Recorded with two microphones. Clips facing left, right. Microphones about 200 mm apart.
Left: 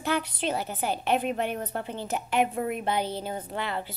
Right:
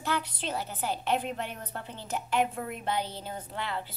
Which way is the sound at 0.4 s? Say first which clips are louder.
Left 5 dB; 60° left (ahead or behind).